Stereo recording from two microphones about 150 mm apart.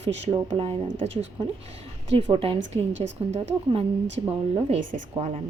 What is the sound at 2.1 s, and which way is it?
A woman's voice, 35° right (ahead or behind).